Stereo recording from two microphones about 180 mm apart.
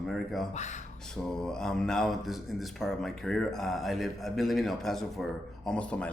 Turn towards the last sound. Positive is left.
turn(degrees=5)  # may be behind; listen again after turning